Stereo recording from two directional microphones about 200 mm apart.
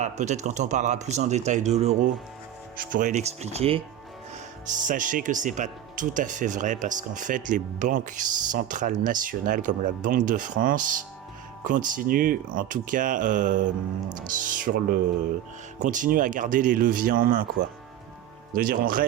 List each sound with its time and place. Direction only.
0.0 s speech: 35° right (ahead or behind)
4.7 s speech: 40° right (ahead or behind)
18.5 s speech: 45° right (ahead or behind)